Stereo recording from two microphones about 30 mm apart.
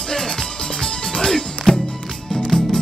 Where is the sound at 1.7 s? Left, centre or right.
Centre.